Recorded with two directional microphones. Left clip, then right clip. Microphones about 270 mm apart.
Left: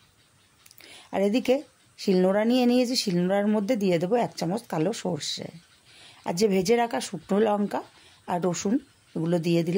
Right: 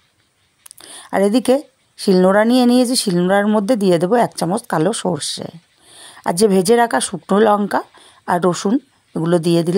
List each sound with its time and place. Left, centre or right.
0.7 s speech: right